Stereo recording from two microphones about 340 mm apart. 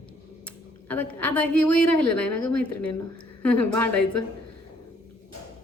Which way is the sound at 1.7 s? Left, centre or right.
Left.